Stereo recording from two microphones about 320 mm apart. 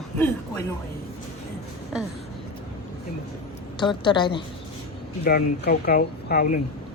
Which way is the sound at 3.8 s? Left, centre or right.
Centre.